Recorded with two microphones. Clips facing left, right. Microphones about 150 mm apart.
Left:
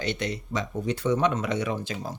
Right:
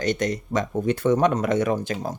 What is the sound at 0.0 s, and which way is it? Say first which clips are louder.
Speech: right 6 dB; 45° right (ahead or behind).